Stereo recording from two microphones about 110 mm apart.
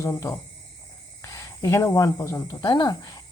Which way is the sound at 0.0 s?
25° left (ahead or behind).